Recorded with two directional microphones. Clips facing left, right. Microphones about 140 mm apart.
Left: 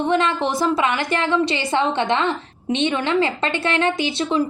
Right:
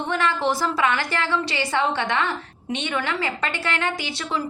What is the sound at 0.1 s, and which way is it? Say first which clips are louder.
A woman's voice: even; 20° left (ahead or behind).